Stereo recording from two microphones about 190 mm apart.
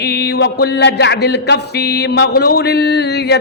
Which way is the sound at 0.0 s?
60° left (ahead or behind).